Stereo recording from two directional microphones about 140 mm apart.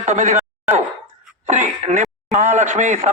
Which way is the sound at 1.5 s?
60° right (ahead or behind).